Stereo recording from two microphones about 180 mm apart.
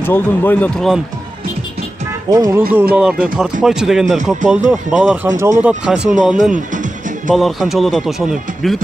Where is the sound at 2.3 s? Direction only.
20° right (ahead or behind).